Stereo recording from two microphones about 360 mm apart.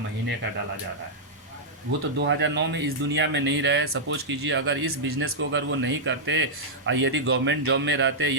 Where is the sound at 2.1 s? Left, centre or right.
Right.